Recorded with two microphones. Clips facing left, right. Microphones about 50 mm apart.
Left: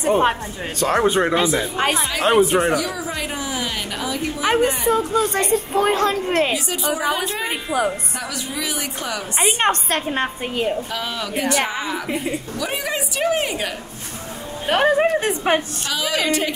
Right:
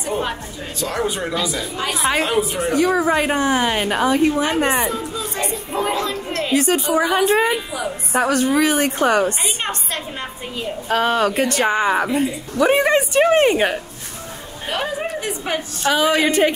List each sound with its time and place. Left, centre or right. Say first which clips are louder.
0.0 s speech: left 6 dB; left
2.7 s a woman's voice: right 6 dB; right
4.9 s a woman's voice: left 7 dB; left
6.5 s a woman's voice: right 6 dB; right
9.4 s a woman's voice: left 6 dB; left
10.9 s a woman's voice: right 9 dB; right
14.7 s speech: left 7 dB; left
15.8 s a woman's voice: right 6 dB; right